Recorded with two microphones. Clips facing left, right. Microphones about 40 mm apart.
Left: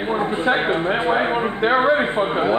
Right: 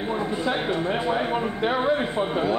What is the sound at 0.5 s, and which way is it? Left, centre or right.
Speech, left.